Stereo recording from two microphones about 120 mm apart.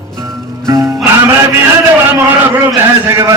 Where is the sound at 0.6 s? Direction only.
30° right (ahead or behind).